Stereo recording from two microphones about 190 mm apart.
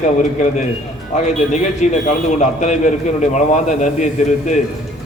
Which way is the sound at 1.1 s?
40° left (ahead or behind).